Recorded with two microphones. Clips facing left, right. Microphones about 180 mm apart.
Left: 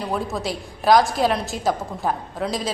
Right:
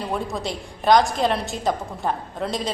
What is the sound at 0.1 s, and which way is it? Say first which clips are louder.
A woman's voice: left 2 dB; centre (ahead or behind).